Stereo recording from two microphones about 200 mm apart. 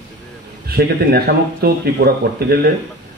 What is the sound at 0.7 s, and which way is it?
Speech, 50° right (ahead or behind).